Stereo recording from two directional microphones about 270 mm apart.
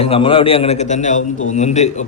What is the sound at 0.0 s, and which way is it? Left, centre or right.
A man's voice, left.